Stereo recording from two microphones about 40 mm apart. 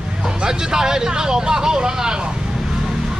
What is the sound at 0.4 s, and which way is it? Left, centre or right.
Speech, centre.